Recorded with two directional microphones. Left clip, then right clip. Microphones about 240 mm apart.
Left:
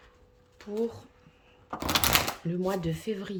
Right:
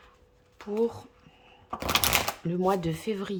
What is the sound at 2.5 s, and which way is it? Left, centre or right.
Speech, centre.